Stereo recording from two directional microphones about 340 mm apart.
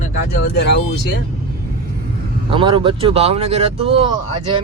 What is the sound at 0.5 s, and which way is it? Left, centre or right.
Speech, left.